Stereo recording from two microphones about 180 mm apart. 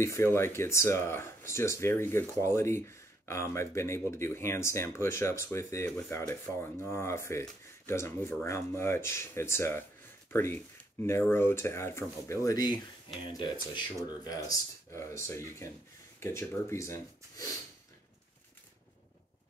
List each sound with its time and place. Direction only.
0.0 s speech: 15° left (ahead or behind)